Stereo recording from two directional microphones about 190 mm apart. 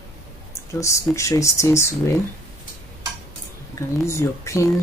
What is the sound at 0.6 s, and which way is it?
Speech, 15° left (ahead or behind).